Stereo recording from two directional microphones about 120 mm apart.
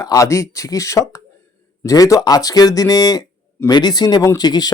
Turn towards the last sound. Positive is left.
turn(degrees=35)  # may be behind; listen again after turning